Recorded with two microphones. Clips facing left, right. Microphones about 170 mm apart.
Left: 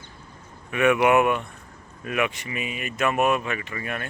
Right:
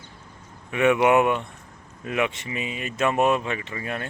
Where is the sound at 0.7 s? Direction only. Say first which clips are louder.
Even; 25° right (ahead or behind).